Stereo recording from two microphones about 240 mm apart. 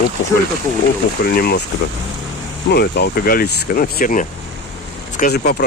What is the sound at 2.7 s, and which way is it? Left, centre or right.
Speech, left.